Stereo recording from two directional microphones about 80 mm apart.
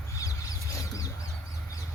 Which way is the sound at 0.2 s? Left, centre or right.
Left.